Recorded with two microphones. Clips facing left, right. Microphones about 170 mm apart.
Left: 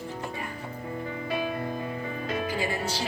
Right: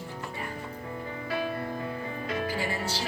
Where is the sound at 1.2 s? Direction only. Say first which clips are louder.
Left 1 dB; 20° left (ahead or behind).